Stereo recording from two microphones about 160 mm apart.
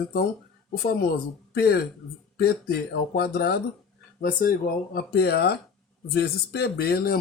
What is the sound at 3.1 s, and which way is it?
Speech, 80° left.